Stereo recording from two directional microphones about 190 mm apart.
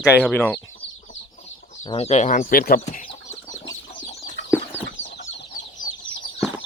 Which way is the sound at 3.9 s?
30° left (ahead or behind).